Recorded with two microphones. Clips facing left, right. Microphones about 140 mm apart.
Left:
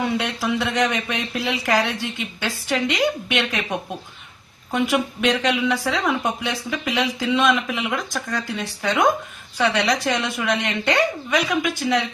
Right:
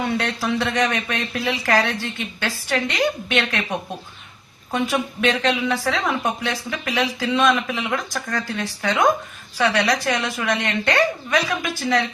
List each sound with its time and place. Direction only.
0.2 s a woman's voice: 15° left (ahead or behind)